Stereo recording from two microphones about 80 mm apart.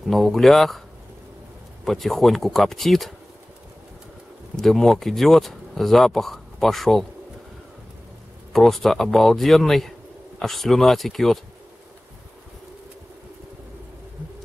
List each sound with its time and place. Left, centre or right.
0.0 s speech: centre
1.9 s speech: centre
4.6 s speech: centre
8.5 s speech: centre